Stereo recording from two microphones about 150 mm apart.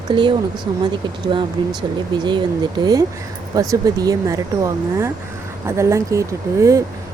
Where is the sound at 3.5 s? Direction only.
25° right (ahead or behind).